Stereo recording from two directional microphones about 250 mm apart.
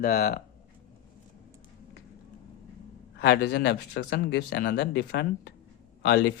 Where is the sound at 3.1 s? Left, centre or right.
Left.